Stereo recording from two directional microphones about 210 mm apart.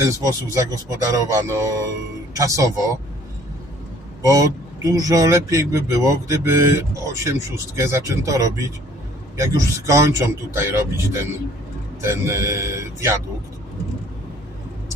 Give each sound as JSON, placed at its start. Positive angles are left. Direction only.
{"t": 0.0, "sound": "a man's voice", "side_deg": -15}
{"t": 4.2, "sound": "a man's voice", "side_deg": -15}